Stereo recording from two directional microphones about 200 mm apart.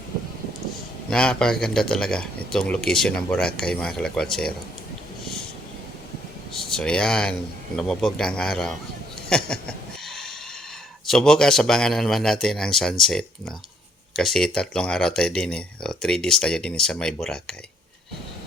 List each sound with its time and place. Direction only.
1.1 s speech: 5° left (ahead or behind)
6.6 s speech: 5° left (ahead or behind)
9.3 s a sound: 5° left (ahead or behind)
11.0 s speech: centre (ahead or behind)